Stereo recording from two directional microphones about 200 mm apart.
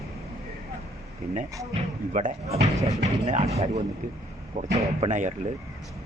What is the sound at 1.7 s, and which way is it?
Speech, 35° right (ahead or behind).